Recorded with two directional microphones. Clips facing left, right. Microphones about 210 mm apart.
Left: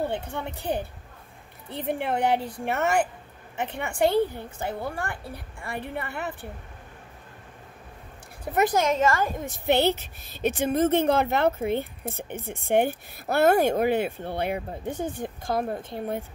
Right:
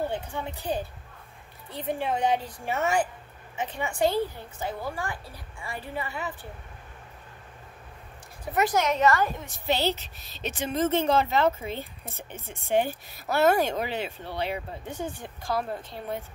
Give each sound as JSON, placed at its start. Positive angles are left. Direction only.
{"t": 0.1, "sound": "a woman's voice", "side_deg": 60}
{"t": 8.5, "sound": "a woman's voice", "side_deg": 50}